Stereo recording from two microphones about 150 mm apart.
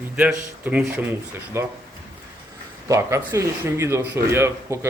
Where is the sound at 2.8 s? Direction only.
20° right (ahead or behind).